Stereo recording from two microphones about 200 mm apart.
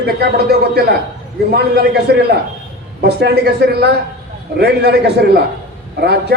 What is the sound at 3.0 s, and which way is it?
A man's voice, 55° right (ahead or behind).